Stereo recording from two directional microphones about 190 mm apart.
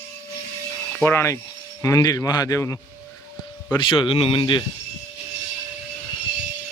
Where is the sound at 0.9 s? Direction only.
10° left (ahead or behind).